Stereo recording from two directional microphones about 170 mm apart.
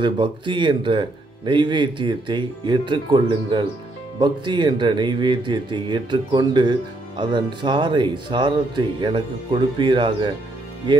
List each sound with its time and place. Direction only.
0.0 s speech: 30° right (ahead or behind)